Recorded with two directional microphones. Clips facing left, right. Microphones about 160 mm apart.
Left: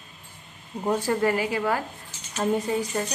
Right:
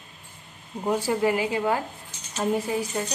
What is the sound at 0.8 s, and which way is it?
Speech, 10° right (ahead or behind).